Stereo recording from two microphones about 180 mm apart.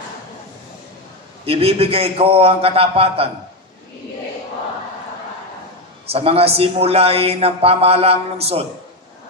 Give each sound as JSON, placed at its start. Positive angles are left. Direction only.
{"t": 1.4, "sound": "speech", "side_deg": -30}
{"t": 6.0, "sound": "speech", "side_deg": -35}